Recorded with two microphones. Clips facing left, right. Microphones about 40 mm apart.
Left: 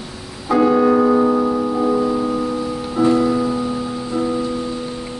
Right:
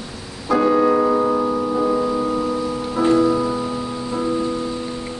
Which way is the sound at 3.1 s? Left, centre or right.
Centre.